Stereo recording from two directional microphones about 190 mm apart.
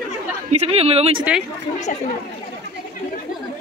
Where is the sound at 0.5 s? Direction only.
30° right (ahead or behind).